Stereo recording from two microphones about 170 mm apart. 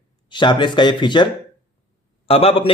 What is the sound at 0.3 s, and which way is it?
A man's voice, 25° left (ahead or behind).